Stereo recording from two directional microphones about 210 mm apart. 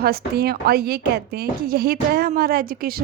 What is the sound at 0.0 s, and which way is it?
Speech, 45° right (ahead or behind).